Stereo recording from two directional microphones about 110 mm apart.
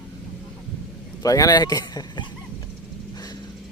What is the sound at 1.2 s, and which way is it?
Speech, 35° left (ahead or behind).